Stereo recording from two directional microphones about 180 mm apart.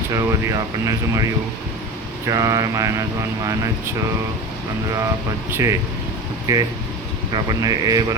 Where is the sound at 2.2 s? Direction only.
20° right (ahead or behind).